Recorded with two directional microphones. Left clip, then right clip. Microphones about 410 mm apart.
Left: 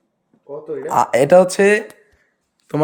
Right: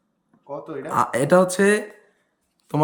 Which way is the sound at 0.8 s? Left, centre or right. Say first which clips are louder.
Left 7 dB; centre.